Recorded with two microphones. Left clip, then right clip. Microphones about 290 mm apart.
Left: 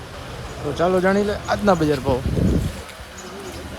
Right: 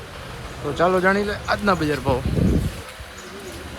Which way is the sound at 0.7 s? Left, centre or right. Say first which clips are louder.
Even; centre.